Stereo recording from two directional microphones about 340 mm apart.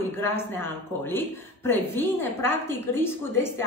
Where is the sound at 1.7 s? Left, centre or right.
Centre.